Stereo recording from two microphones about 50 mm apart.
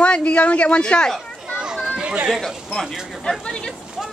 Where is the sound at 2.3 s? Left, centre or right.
Centre.